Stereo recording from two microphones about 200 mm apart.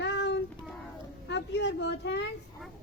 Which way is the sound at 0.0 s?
60° left (ahead or behind).